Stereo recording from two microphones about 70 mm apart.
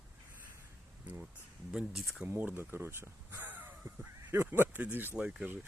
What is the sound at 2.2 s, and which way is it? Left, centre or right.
Speech, right.